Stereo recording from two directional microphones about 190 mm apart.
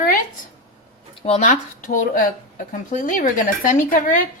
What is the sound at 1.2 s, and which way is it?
Speech, 35° left (ahead or behind).